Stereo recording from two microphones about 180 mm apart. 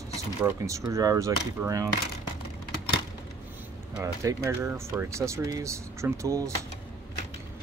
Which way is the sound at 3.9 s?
15° right (ahead or behind).